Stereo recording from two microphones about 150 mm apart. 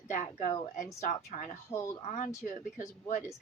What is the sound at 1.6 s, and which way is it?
Speech, 20° left (ahead or behind).